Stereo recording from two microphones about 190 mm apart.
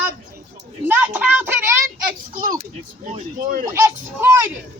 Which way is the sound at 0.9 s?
10° right (ahead or behind).